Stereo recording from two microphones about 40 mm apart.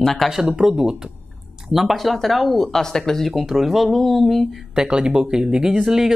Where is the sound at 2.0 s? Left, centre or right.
Centre.